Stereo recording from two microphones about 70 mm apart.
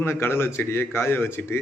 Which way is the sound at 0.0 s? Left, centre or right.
Left.